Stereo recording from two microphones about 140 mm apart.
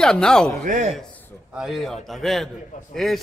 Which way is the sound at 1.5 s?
Centre (ahead or behind).